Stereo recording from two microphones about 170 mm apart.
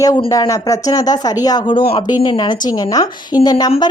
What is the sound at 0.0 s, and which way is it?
Speech, 20° left (ahead or behind).